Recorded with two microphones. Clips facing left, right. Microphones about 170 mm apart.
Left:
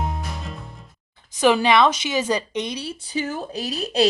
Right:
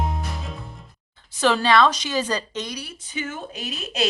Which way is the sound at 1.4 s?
15° left (ahead or behind).